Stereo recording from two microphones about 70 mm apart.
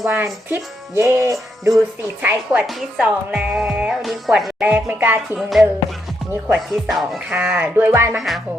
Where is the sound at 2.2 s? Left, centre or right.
Centre.